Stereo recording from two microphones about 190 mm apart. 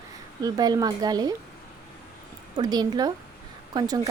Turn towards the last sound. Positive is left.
turn(degrees=-20)  # may be behind; listen again after turning